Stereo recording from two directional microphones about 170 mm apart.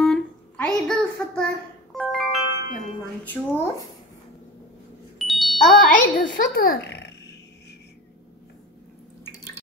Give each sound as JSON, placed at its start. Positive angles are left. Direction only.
{"t": 0.0, "sound": "a sound", "side_deg": 5}
{"t": 3.3, "sound": "speech", "side_deg": 15}
{"t": 5.2, "sound": "wind chime", "side_deg": 0}
{"t": 5.8, "sound": "a child's voice", "side_deg": 50}